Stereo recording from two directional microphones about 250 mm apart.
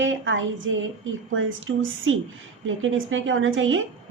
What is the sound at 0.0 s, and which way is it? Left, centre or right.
A woman's voice, right.